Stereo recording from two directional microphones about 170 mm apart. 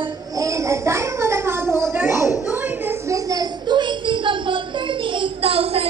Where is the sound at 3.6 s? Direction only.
30° right (ahead or behind).